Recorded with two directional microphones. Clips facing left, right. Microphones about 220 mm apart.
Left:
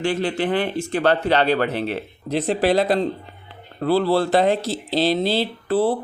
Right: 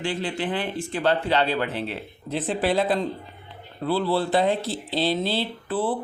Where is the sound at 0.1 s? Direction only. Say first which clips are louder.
Left 6 dB; 65° left (ahead or behind).